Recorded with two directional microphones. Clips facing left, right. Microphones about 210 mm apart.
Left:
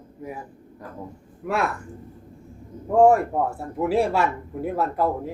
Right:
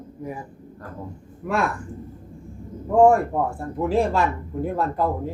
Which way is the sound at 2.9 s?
5° left (ahead or behind).